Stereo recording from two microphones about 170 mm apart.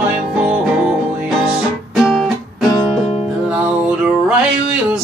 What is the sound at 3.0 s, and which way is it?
Music, 35° left (ahead or behind).